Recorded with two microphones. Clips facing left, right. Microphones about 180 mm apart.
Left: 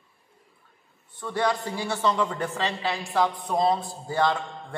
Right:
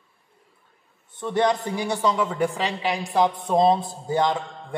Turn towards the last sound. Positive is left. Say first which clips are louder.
# right 2 dB
turn(degrees=-15)  # may be behind; listen again after turning